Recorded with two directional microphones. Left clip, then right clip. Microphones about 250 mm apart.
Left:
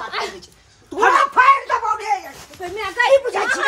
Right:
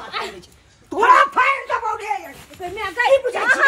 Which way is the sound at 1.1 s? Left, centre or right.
Centre.